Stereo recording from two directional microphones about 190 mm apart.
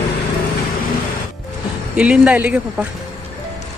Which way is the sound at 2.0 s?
5° right (ahead or behind).